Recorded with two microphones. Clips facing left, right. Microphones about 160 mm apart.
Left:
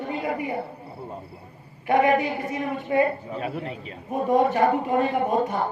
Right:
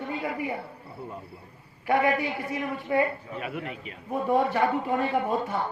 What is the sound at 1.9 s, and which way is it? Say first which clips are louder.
A man's voice: left 4 dB; 20° left (ahead or behind).